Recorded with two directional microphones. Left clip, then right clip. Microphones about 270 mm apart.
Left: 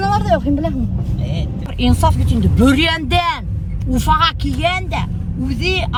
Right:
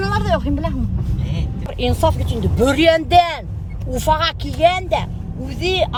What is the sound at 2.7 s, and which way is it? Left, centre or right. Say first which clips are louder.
Speech: right 4 dB; centre.